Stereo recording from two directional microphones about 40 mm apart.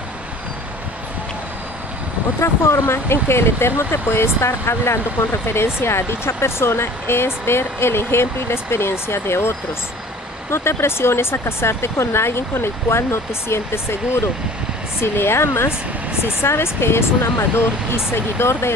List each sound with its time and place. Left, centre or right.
2.4 s speech: left